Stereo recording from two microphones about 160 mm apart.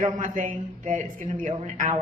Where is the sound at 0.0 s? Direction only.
55° right (ahead or behind).